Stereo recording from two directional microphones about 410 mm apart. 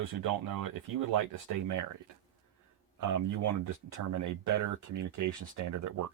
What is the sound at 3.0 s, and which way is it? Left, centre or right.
Speech, right.